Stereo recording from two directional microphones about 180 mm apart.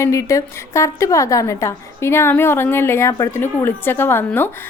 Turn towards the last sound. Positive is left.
turn(degrees=10)  # may be behind; listen again after turning